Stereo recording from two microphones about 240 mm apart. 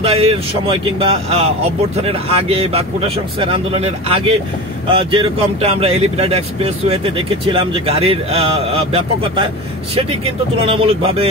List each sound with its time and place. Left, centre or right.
0.0 s speech: right